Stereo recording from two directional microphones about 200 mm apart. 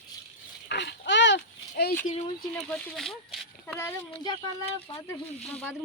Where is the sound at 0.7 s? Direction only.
55° left (ahead or behind).